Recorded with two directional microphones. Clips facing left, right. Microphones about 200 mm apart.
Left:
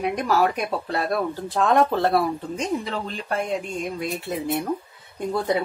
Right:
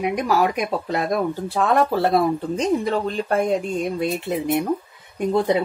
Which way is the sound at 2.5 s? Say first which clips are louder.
Right 6 dB; 40° right (ahead or behind).